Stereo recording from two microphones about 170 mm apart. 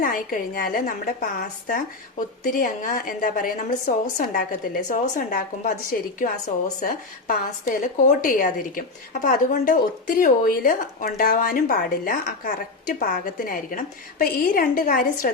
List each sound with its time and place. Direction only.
0.0 s a woman's voice: 55° left (ahead or behind)